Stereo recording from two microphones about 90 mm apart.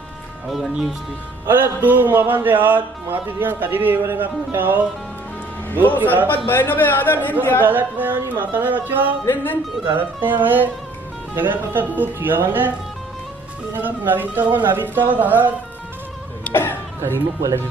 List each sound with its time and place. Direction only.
0.5 s speech: centre (ahead or behind)
1.4 s speech: 25° right (ahead or behind)
6.2 s a man's voice: 20° left (ahead or behind)
7.6 s speech: 20° right (ahead or behind)
9.3 s a man's voice: 20° left (ahead or behind)
9.9 s speech: 20° right (ahead or behind)
13.7 s speech: 20° right (ahead or behind)
16.4 s a sound: 25° left (ahead or behind)
17.0 s speech: 35° right (ahead or behind)